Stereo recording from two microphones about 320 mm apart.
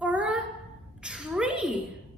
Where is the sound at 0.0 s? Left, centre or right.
Centre.